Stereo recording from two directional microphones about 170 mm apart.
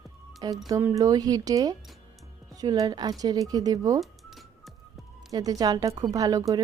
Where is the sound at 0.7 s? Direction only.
15° right (ahead or behind).